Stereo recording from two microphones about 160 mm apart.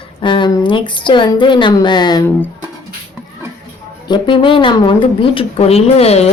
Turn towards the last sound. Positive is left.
turn(degrees=40)  # may be behind; listen again after turning